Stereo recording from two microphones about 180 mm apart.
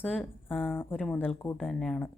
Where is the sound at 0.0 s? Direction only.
10° left (ahead or behind).